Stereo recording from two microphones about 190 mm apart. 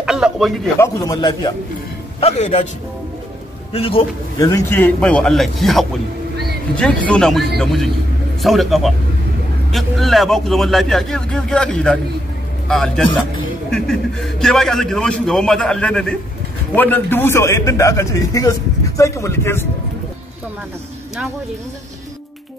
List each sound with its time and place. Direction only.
0.0 s a sound: 5° right (ahead or behind)
0.7 s a man's voice: 15° left (ahead or behind)
2.1 s a man's voice: 35° left (ahead or behind)
3.7 s a man's voice: 30° left (ahead or behind)
4.4 s a man's voice: 15° left (ahead or behind)